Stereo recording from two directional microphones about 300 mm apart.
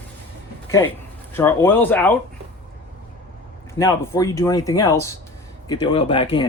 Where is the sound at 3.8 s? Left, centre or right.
Centre.